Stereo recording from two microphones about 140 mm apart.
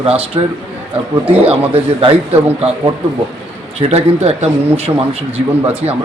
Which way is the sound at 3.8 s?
45° right (ahead or behind).